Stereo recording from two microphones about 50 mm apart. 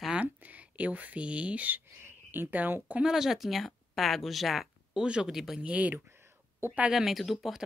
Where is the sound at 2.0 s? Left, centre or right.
Right.